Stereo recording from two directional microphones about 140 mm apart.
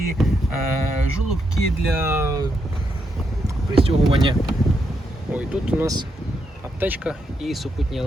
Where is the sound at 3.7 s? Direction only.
45° right (ahead or behind).